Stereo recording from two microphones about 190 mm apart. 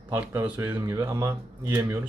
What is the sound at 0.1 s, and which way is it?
Speech, 10° right (ahead or behind).